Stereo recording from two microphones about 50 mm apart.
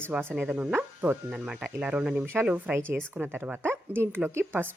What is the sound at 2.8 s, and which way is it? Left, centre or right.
Speech, right.